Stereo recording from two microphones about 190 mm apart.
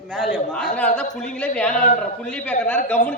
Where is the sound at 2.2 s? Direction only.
5° left (ahead or behind).